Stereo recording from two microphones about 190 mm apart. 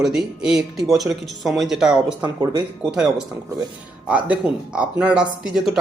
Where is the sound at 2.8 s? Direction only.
5° right (ahead or behind).